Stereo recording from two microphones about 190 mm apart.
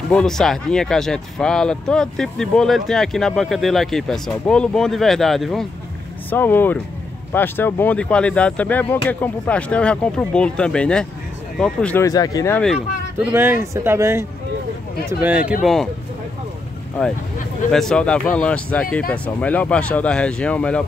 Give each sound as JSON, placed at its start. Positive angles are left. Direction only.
{"t": 0.1, "sound": "speech", "side_deg": 5}
{"t": 12.1, "sound": "speech", "side_deg": 20}
{"t": 12.5, "sound": "speech", "side_deg": 0}
{"t": 13.3, "sound": "speech", "side_deg": -10}
{"t": 17.6, "sound": "speech", "side_deg": 5}